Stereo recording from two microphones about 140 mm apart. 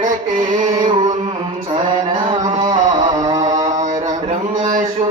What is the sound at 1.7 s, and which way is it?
Mantra, 35° right (ahead or behind).